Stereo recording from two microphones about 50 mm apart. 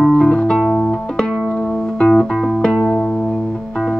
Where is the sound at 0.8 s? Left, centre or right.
Centre.